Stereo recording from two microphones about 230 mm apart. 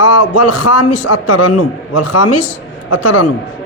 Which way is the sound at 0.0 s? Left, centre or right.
Left.